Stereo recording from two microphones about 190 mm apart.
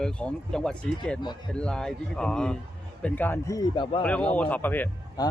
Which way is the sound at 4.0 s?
5° left (ahead or behind).